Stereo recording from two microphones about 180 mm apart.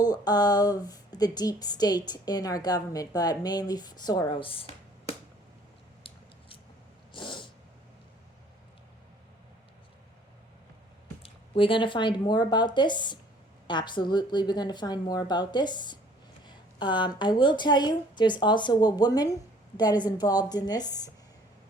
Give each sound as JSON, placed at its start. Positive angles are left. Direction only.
{"t": 0.0, "sound": "a woman's voice", "side_deg": 20}
{"t": 7.1, "sound": "a sound", "side_deg": 25}
{"t": 11.2, "sound": "a woman's voice", "side_deg": 30}